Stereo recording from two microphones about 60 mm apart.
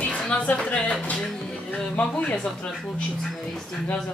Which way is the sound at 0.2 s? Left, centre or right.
Centre.